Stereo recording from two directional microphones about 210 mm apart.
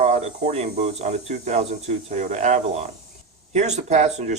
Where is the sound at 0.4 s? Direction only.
30° right (ahead or behind).